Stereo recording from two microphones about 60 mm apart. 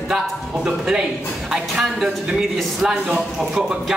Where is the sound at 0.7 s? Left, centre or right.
Centre.